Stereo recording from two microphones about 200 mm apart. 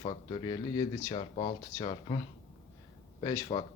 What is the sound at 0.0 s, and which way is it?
Speech, 30° left (ahead or behind).